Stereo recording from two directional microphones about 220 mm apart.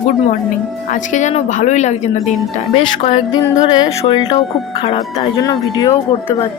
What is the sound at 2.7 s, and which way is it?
Music, 25° left (ahead or behind).